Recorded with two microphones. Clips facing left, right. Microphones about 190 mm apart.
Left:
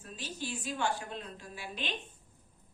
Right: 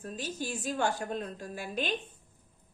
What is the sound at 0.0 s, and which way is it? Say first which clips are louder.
A woman's voice: right 5 dB; 45° right (ahead or behind).